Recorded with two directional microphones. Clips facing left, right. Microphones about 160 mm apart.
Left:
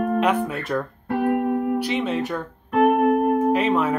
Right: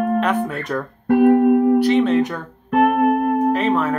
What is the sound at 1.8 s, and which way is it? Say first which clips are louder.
Speech: right 8 dB; 10° left (ahead or behind).